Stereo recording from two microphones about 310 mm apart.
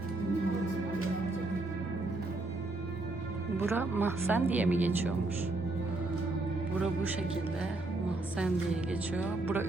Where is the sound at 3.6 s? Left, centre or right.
Centre.